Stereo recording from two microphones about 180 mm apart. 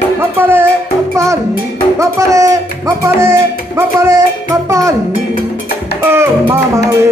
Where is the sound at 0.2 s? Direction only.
10° right (ahead or behind).